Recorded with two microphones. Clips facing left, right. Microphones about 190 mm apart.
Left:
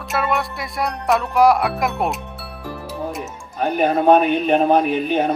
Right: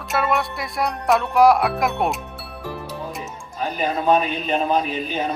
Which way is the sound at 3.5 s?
60° left (ahead or behind).